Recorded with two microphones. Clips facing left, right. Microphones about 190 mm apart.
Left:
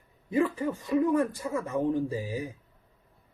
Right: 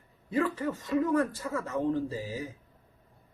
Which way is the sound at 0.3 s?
15° left (ahead or behind).